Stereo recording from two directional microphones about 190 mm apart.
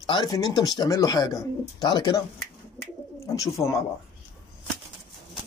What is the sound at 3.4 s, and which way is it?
Speech, 15° left (ahead or behind).